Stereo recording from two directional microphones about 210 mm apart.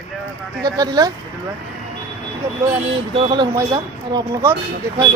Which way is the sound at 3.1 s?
25° right (ahead or behind).